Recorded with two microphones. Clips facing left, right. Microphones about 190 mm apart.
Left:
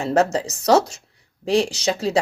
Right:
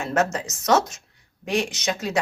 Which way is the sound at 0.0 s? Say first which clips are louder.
Left 4 dB; 35° left (ahead or behind).